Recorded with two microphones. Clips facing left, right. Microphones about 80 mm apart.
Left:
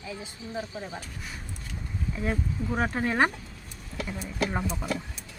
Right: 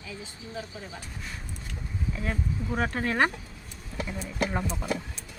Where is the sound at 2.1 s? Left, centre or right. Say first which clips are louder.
Left 3 dB; centre.